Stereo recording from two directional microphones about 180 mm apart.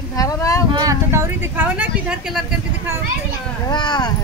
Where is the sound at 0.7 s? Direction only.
20° right (ahead or behind).